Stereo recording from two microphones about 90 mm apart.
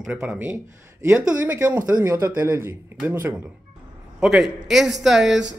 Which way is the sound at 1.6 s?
20° right (ahead or behind).